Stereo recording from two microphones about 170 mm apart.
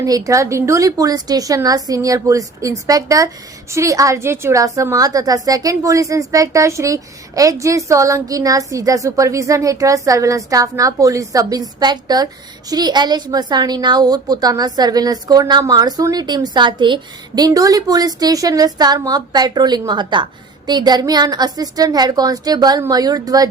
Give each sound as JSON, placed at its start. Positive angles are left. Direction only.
{"t": 0.0, "sound": "a woman's voice", "side_deg": -20}